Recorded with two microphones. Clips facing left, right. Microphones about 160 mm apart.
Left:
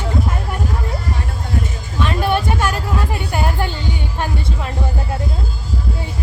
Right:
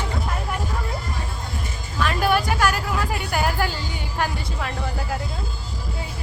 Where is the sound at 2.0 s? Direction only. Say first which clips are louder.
Left 2 dB; 25° left (ahead or behind).